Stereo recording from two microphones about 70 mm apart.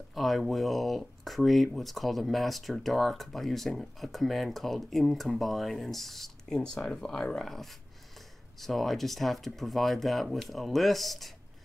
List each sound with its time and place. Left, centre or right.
0.1 s speech: centre